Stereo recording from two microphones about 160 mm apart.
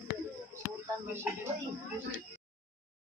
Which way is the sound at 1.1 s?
15° right (ahead or behind).